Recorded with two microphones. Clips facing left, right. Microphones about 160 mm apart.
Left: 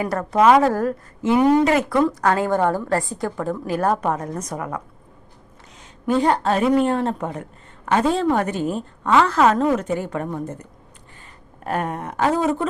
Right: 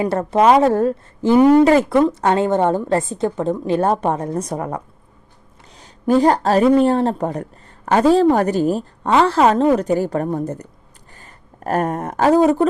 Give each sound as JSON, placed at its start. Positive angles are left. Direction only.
{"t": 0.0, "sound": "a woman's voice", "side_deg": -25}
{"t": 5.8, "sound": "a woman's voice", "side_deg": -35}